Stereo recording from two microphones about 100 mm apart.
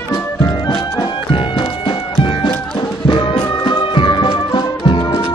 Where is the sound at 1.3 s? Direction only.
60° left (ahead or behind).